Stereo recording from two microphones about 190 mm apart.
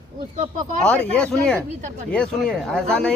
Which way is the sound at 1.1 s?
5° left (ahead or behind).